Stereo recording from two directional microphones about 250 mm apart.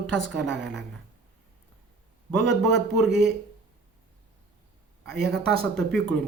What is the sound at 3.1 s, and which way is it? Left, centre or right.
Speech, right.